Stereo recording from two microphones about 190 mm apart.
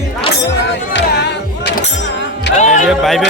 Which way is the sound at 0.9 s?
65° left (ahead or behind).